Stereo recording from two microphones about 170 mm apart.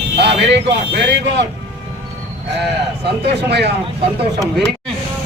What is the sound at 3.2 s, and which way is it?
Speech, 75° right (ahead or behind).